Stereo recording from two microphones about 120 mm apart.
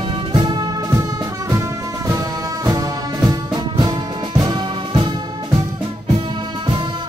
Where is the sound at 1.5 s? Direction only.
25° right (ahead or behind).